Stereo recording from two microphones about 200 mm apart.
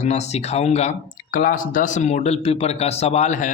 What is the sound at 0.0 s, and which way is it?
A man's voice, 35° left (ahead or behind).